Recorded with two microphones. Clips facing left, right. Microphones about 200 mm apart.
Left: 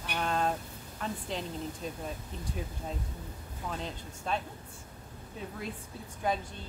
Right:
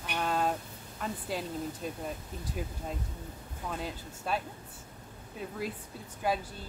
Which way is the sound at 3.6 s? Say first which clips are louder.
Right 1 dB; 5° right (ahead or behind).